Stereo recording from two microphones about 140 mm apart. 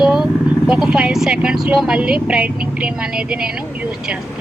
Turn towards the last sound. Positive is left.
turn(degrees=-5)  # may be behind; listen again after turning